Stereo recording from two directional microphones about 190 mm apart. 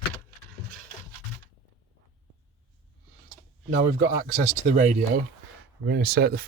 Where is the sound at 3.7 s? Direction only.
50° right (ahead or behind).